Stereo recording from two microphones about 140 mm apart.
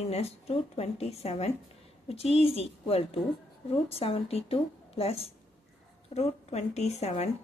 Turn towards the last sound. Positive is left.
turn(degrees=50)  # may be behind; listen again after turning